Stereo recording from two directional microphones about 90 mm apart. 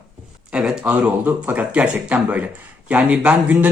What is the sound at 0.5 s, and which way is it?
A man's voice, 5° right (ahead or behind).